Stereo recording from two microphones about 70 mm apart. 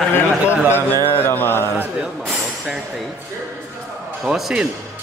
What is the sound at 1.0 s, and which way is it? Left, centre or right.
Mantra, left.